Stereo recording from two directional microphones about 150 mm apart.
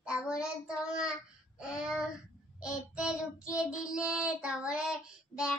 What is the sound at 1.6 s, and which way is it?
Child singing, 5° right (ahead or behind).